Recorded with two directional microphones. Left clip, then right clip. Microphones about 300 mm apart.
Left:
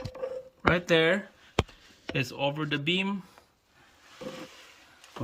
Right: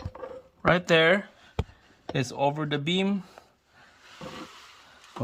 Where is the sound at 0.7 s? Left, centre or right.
Centre.